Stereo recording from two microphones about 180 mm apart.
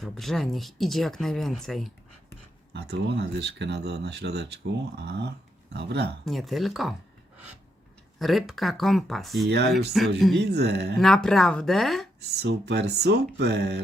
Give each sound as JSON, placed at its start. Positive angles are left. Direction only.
{"t": 0.0, "sound": "speech", "side_deg": 0}
{"t": 2.7, "sound": "speech", "side_deg": -70}
{"t": 6.2, "sound": "speech", "side_deg": 0}
{"t": 8.2, "sound": "speech", "side_deg": 0}
{"t": 9.5, "sound": "speech", "side_deg": -65}
{"t": 10.0, "sound": "speech", "side_deg": 0}
{"t": 10.3, "sound": "speech", "side_deg": -65}
{"t": 10.9, "sound": "speech", "side_deg": 0}
{"t": 12.4, "sound": "speech", "side_deg": -65}